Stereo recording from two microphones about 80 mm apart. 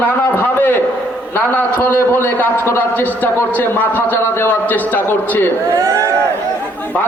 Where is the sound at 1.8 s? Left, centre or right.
Left.